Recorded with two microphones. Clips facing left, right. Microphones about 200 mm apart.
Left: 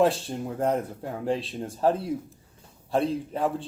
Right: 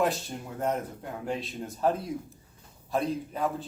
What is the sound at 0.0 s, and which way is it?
A man's voice, 30° left (ahead or behind).